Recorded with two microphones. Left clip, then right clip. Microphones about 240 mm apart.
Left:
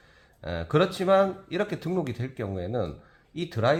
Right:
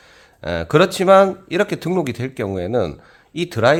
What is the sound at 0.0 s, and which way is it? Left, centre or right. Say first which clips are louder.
Speech: right 10 dB; right.